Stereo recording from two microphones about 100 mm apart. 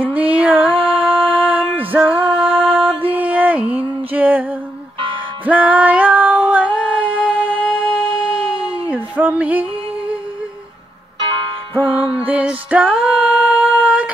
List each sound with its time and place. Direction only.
0.3 s music: 15° right (ahead or behind)
0.7 s music: 65° right (ahead or behind)
1.9 s music: 15° right (ahead or behind)
5.4 s female singing: 15° right (ahead or behind)
8.9 s a sound: 15° right (ahead or behind)
11.8 s music: 10° right (ahead or behind)